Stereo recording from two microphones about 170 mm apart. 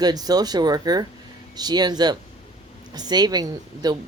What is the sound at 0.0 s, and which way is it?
Speech, 25° right (ahead or behind).